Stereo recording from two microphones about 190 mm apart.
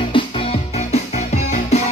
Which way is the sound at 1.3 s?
35° left (ahead or behind).